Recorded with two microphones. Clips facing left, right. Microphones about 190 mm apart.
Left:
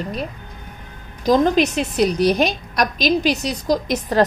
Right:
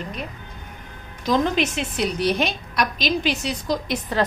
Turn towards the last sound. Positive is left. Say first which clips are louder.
# left 5 dB
turn(degrees=40)  # may be behind; listen again after turning